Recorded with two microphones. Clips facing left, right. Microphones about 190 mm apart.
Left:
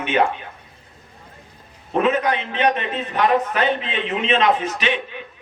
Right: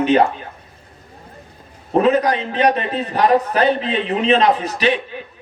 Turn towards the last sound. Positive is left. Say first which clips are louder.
# right 5 dB
turn(degrees=-35)  # may be behind; listen again after turning